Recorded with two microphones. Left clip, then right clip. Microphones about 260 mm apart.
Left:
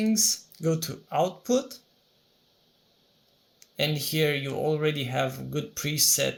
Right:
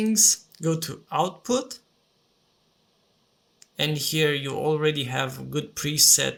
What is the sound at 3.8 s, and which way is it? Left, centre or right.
Speech, centre.